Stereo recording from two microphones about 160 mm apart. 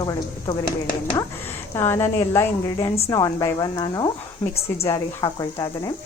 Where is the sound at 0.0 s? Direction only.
25° left (ahead or behind).